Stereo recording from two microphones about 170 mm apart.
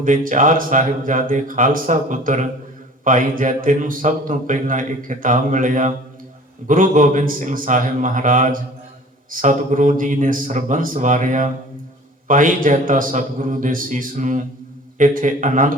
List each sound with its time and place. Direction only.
0.0 s a man's voice: 50° right (ahead or behind)